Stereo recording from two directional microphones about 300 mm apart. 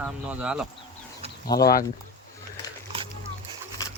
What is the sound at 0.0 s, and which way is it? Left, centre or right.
Speech, centre.